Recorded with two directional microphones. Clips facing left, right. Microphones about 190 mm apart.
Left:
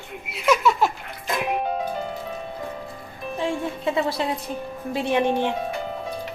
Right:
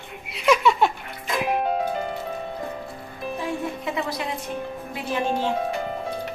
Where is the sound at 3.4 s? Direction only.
30° left (ahead or behind).